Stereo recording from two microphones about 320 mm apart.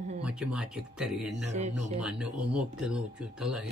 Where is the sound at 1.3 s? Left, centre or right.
Right.